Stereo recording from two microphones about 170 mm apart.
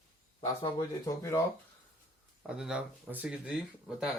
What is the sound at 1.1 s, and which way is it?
Speech, 15° left (ahead or behind).